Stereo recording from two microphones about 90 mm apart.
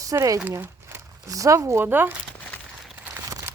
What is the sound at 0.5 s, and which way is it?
Crumpling, 25° right (ahead or behind).